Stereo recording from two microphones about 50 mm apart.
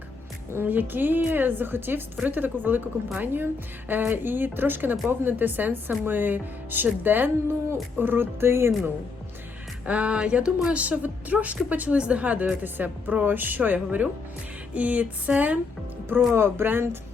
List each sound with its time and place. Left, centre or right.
0.6 s a woman's voice: right
9.8 s a woman's voice: right
14.7 s a sound: right
15.3 s a woman's voice: right
16.0 s a woman's voice: right